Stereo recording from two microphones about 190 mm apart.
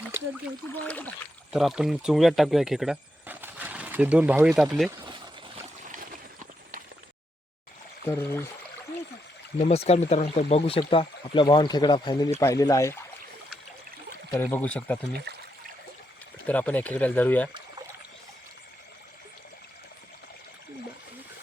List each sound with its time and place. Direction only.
0.7 s speech: 10° left (ahead or behind)
1.5 s speech: centre (ahead or behind)
8.0 s speech: 10° left (ahead or behind)
9.6 s speech: 35° left (ahead or behind); by 13.0 s 15° left (ahead or behind)
14.3 s speech: 10° left (ahead or behind)
15.3 s trickle: 65° right (ahead or behind)
16.5 s speech: 10° left (ahead or behind)